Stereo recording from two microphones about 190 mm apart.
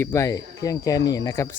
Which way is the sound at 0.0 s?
15° left (ahead or behind).